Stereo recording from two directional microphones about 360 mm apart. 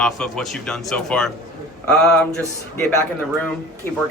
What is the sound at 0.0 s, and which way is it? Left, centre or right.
Speech, centre.